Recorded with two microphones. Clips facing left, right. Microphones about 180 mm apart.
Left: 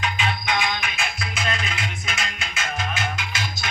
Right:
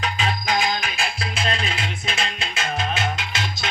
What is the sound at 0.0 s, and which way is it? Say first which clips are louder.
Music: right 1 dB; 35° right (ahead or behind).